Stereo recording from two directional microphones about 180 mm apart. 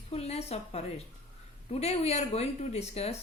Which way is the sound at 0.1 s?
35° left (ahead or behind).